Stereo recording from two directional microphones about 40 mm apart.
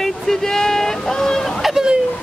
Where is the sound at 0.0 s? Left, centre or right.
Centre.